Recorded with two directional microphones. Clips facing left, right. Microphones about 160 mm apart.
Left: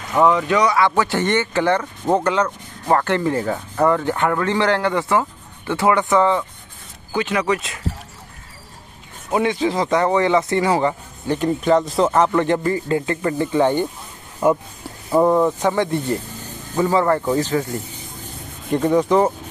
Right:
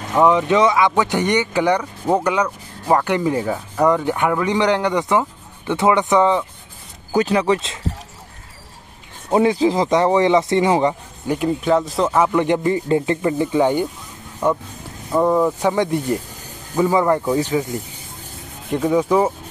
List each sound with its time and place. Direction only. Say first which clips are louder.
0.1 s speech: right 1 dB; 15° right (ahead or behind)
7.2 s speech: right 4 dB; 30° right (ahead or behind)
9.3 s speech: right 4 dB; 30° right (ahead or behind)
11.3 s speech: left 1 dB; 5° right (ahead or behind)
12.4 s speech: right 1 dB; 15° right (ahead or behind)
14.4 s speech: left 2 dB; 5° left (ahead or behind)
15.6 s speech: right 1 dB; 15° right (ahead or behind)
18.7 s speech: left 1 dB; centre (ahead or behind)